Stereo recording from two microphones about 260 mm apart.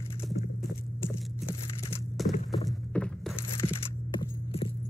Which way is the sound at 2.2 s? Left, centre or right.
Left.